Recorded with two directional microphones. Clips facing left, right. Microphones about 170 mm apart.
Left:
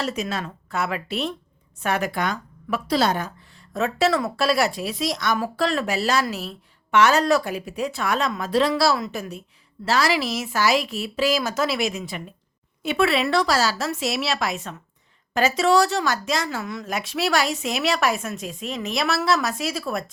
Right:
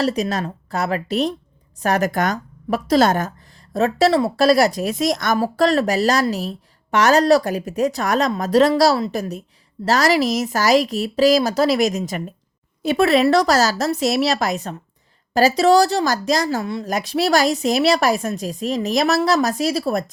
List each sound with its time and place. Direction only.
0.0 s speech: 35° right (ahead or behind)